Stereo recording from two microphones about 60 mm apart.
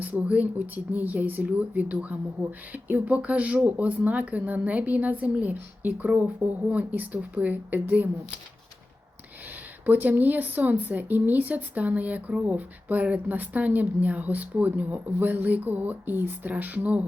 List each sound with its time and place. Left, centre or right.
0.0 s speech: right
9.8 s speech: right